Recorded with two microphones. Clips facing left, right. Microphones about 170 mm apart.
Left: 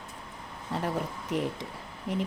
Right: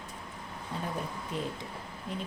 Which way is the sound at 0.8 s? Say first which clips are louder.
Left 5 dB; 85° left.